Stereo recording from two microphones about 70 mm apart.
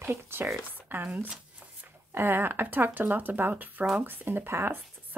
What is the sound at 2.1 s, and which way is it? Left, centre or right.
Speech, right.